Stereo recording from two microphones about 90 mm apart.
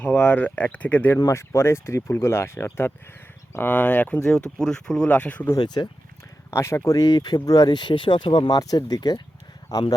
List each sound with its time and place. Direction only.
0.0 s speech: 15° left (ahead or behind)
1.3 s speech: 30° left (ahead or behind)
4.2 s speech: 5° left (ahead or behind)
5.0 s speech: 15° left (ahead or behind)
5.5 s speech: 50° left (ahead or behind)
6.5 s speech: 30° left (ahead or behind); by 9.2 s 50° left (ahead or behind)